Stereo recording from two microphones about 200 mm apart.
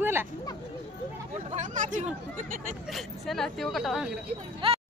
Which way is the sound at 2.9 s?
Centre (ahead or behind).